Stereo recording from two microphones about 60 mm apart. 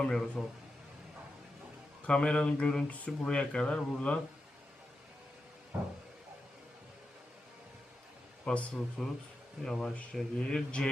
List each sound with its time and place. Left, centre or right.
0.0 s speech: centre
2.0 s speech: centre
8.4 s speech: centre